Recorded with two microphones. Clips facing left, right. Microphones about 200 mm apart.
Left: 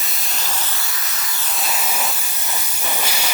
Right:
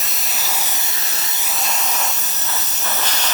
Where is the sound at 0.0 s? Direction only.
Centre (ahead or behind); by 1.5 s 25° right (ahead or behind).